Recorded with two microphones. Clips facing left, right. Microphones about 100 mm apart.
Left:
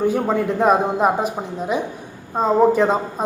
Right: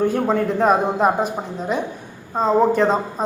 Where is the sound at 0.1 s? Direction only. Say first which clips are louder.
Even; 5° left (ahead or behind).